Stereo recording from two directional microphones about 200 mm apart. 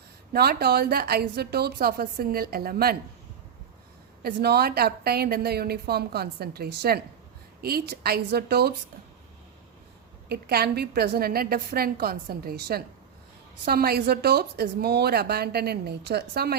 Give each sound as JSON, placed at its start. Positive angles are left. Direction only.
{"t": 0.3, "sound": "a woman's voice", "side_deg": -50}
{"t": 4.2, "sound": "a woman's voice", "side_deg": -50}
{"t": 10.2, "sound": "a woman's voice", "side_deg": -50}